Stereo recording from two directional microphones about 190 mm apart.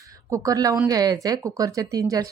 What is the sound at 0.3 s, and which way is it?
Speech, 20° right (ahead or behind).